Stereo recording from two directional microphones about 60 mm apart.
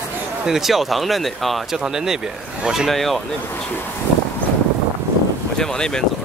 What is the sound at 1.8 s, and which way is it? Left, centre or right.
Speech, centre.